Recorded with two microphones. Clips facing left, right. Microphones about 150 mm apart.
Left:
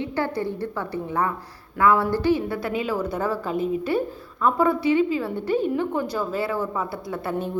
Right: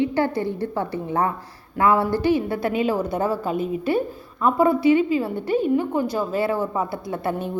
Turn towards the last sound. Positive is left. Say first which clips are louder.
# right 2 dB
turn(degrees=-15)  # may be behind; listen again after turning